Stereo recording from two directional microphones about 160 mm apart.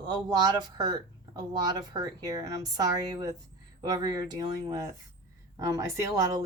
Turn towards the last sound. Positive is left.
turn(degrees=-20)  # may be behind; listen again after turning